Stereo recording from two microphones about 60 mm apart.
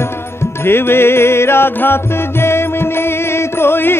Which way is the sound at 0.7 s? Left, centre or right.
Left.